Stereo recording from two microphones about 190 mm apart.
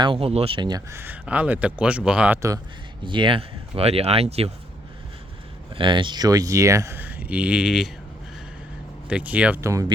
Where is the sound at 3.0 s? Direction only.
25° right (ahead or behind).